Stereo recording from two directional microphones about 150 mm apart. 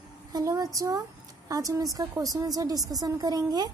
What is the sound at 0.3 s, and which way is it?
A woman's voice, 25° right (ahead or behind).